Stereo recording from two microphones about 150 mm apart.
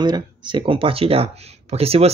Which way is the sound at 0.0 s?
30° right (ahead or behind).